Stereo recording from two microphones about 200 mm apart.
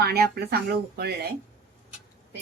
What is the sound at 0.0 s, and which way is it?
Speech, 50° right (ahead or behind).